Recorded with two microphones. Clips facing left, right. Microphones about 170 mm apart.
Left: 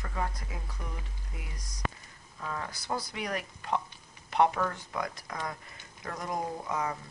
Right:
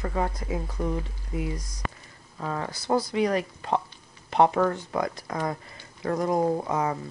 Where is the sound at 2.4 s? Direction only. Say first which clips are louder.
Right 6 dB; 35° right (ahead or behind).